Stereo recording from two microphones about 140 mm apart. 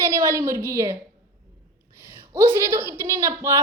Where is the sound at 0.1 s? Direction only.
20° right (ahead or behind).